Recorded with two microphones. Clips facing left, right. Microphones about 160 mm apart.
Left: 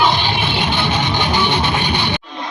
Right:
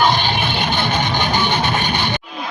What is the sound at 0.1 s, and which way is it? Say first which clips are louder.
Music: even; 50° right (ahead or behind).